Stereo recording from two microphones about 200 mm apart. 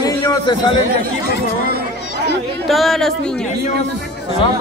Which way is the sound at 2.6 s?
Centre (ahead or behind).